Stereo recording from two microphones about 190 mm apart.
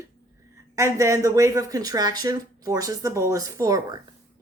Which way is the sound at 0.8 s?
15° right (ahead or behind).